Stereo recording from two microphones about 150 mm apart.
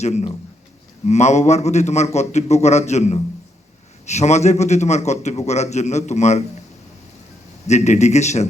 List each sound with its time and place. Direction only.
0.0 s a man's voice: 50° left (ahead or behind)
7.7 s a man's voice: 50° left (ahead or behind)